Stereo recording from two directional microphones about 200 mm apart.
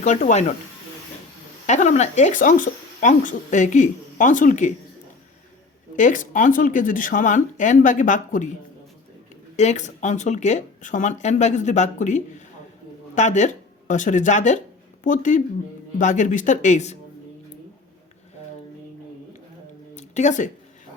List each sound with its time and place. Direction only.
0.0 s speech: 35° left (ahead or behind)
1.6 s speech: 35° left (ahead or behind)
6.0 s speech: 40° left (ahead or behind)
9.6 s speech: 35° left (ahead or behind)
20.0 s speech: 35° left (ahead or behind)